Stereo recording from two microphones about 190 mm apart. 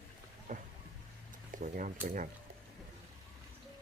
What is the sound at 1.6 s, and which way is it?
Speech, 45° right (ahead or behind).